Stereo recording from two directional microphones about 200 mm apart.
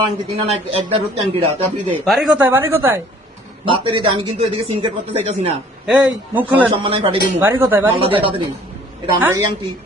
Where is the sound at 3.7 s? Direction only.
25° right (ahead or behind).